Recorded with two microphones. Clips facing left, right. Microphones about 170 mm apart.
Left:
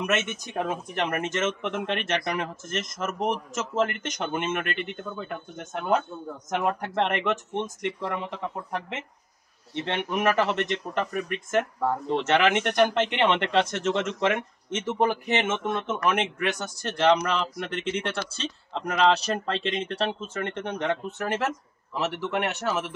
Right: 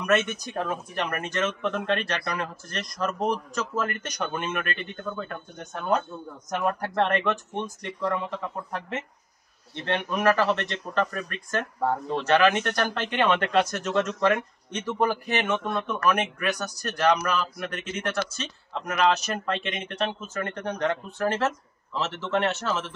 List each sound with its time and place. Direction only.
0.0 s a man's voice: 20° left (ahead or behind)